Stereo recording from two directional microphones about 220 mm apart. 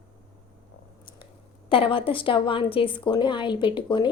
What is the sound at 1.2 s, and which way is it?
A woman's voice, 25° left (ahead or behind).